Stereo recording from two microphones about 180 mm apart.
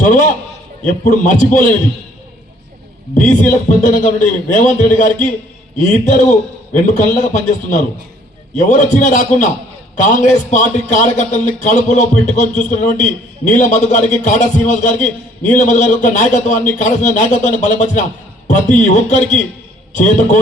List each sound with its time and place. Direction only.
0.0 s a man's voice: 45° left (ahead or behind)
3.8 s a man's voice: 45° left (ahead or behind)